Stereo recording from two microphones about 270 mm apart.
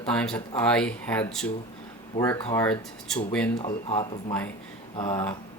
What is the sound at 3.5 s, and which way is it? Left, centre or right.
Speech, centre.